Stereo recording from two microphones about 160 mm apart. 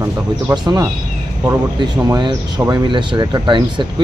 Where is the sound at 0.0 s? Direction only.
20° right (ahead or behind).